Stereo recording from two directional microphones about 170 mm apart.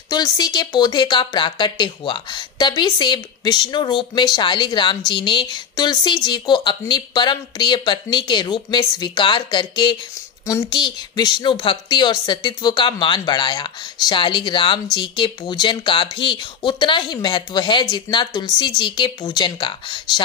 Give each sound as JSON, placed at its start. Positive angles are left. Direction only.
{"t": 0.1, "sound": "speech", "side_deg": 25}